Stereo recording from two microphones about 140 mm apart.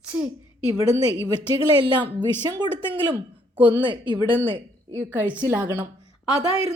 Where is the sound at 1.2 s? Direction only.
30° right (ahead or behind).